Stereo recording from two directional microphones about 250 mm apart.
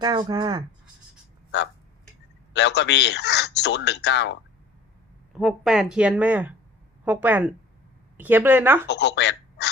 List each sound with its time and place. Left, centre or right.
0.0 s speech: centre
2.5 s a man's voice: left
5.3 s speech: centre
8.9 s speech: left